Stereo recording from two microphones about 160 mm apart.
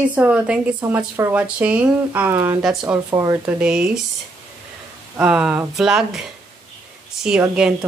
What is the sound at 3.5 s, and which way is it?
Speech, 5° right (ahead or behind).